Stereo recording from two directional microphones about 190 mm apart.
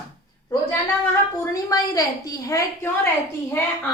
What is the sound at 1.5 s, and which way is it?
A woman's voice, 20° left (ahead or behind).